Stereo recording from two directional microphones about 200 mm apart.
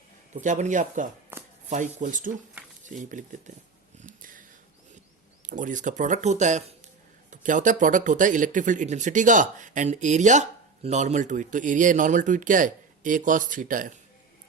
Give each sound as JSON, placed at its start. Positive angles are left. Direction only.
{"t": 0.4, "sound": "speech", "side_deg": -40}
{"t": 1.3, "sound": "shuffling cards", "side_deg": -10}
{"t": 1.7, "sound": "speech", "side_deg": -40}
{"t": 4.0, "sound": "a sound", "side_deg": -40}
{"t": 5.5, "sound": "speech", "side_deg": -40}